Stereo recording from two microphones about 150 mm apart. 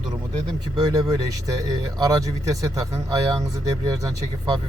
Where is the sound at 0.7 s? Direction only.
25° right (ahead or behind).